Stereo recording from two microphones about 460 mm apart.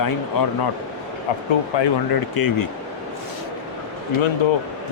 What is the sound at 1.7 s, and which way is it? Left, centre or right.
Speech, left.